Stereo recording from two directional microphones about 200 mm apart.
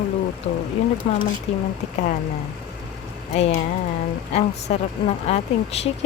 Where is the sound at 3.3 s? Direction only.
30° left (ahead or behind).